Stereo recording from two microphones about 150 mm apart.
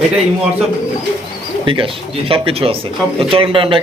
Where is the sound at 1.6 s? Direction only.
35° right (ahead or behind).